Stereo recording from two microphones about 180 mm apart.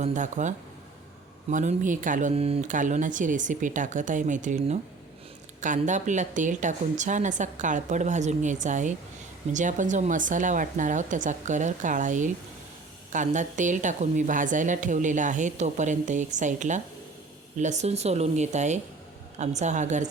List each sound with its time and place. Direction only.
0.0 s a woman's voice: 45° right (ahead or behind)